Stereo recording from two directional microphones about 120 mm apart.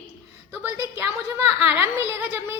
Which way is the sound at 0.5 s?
20° right (ahead or behind).